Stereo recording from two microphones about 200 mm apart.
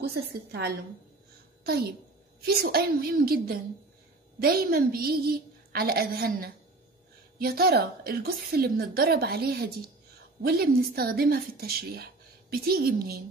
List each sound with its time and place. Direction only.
0.0 s a woman's voice: 55° right (ahead or behind)